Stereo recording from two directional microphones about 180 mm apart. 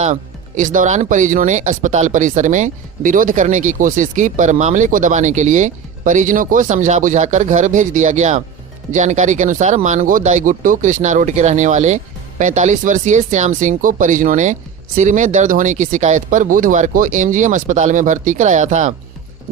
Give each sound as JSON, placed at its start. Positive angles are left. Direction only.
{"t": 0.0, "sound": "speech", "side_deg": -45}